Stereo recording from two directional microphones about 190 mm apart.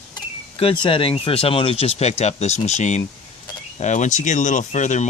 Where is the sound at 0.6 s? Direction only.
25° left (ahead or behind).